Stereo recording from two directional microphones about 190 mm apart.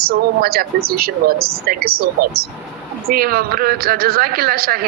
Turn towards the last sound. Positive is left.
turn(degrees=-50)  # may be behind; listen again after turning